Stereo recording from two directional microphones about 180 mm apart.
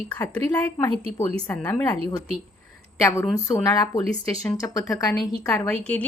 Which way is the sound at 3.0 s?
15° left (ahead or behind).